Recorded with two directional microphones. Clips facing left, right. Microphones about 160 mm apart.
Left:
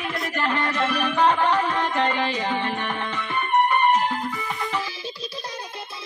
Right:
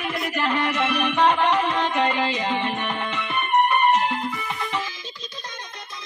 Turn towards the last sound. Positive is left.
turn(degrees=30)  # may be behind; listen again after turning